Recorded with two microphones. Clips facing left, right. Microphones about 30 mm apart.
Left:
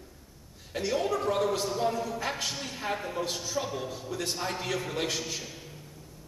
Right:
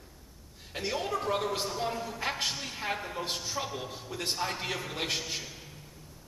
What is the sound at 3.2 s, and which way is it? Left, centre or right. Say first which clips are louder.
Speech: left 1 dB; right.